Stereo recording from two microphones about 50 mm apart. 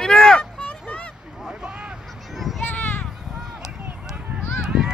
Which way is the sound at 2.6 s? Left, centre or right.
Left.